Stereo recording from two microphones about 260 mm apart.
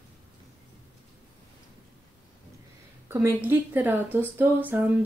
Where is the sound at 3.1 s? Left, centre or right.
Centre.